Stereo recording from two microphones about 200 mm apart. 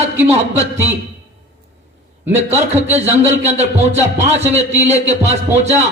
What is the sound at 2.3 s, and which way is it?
Speech, 35° right (ahead or behind).